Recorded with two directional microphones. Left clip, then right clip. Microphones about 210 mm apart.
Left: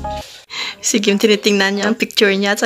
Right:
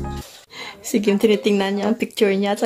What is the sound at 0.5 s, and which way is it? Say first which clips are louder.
Speech: left 6 dB; 5° left (ahead or behind).